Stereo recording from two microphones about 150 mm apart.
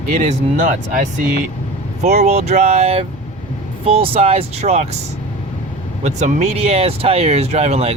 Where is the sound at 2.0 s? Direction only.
50° right (ahead or behind).